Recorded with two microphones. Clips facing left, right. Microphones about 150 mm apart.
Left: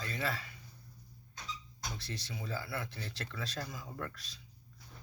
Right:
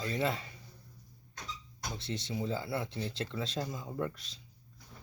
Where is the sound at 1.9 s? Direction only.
25° right (ahead or behind).